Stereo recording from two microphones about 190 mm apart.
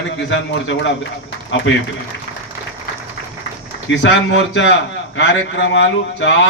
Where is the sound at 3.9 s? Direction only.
70° left (ahead or behind).